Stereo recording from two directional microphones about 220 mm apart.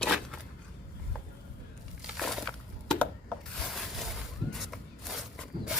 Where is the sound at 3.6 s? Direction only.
Centre (ahead or behind).